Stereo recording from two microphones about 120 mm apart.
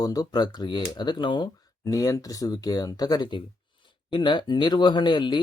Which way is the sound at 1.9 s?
30° left (ahead or behind).